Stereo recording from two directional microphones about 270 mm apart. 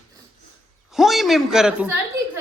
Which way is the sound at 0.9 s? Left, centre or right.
Centre.